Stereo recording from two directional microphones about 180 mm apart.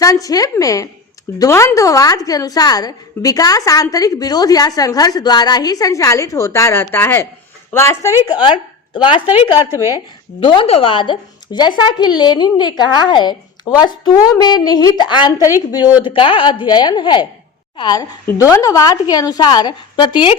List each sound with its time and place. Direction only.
0.0 s a woman's voice: 20° left (ahead or behind)
9.7 s a woman's voice: 20° left (ahead or behind)